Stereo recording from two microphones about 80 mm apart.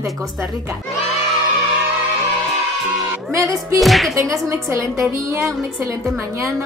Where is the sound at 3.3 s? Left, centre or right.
Right.